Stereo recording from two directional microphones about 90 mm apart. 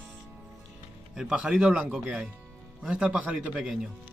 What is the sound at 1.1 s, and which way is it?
A man's voice, 5° right (ahead or behind).